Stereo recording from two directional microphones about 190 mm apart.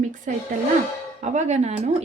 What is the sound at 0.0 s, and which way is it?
A woman's voice, 40° right (ahead or behind).